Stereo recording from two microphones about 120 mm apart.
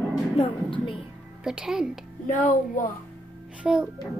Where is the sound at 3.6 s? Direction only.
10° right (ahead or behind).